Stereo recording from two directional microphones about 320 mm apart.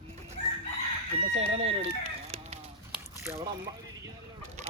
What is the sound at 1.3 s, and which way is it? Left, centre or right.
Speech, centre.